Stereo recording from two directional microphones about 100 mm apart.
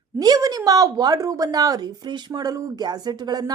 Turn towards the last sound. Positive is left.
turn(degrees=-40)  # may be behind; listen again after turning